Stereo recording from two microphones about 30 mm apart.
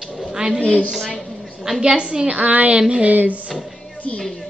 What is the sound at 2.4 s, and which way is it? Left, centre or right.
Speech, right.